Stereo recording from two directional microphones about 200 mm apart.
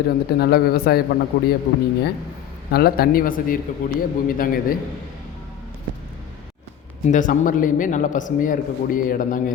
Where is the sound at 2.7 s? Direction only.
50° left (ahead or behind).